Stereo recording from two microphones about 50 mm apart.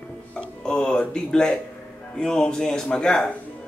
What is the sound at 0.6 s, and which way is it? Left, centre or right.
Speech, centre.